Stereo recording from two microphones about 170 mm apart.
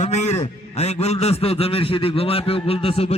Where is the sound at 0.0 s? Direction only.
45° left (ahead or behind).